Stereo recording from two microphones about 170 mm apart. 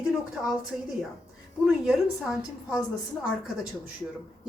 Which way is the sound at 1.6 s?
5° right (ahead or behind).